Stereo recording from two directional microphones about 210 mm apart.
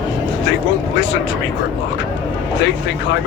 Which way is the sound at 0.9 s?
60° left (ahead or behind).